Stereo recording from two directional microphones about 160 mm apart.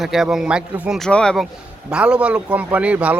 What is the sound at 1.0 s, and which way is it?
A man's voice, 5° left (ahead or behind).